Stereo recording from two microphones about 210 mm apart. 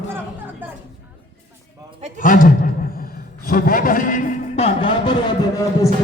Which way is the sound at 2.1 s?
40° left (ahead or behind).